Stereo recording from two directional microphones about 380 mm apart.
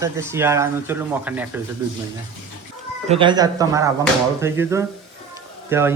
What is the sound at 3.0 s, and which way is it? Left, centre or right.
Speech, centre.